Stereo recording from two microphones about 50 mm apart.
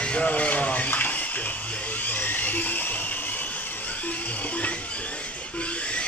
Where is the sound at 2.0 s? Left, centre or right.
Left.